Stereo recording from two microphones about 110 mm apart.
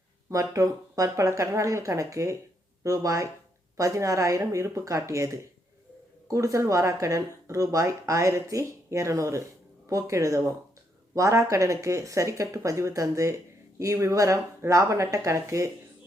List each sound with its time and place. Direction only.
0.3 s speech: 30° right (ahead or behind)